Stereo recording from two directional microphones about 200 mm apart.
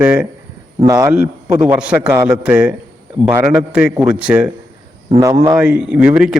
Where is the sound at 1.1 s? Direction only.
5° right (ahead or behind).